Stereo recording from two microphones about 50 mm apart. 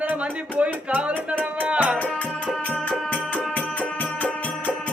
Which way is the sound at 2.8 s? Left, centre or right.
Left.